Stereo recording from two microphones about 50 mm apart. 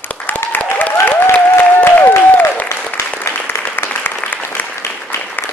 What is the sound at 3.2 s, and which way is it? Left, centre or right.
Applause, left.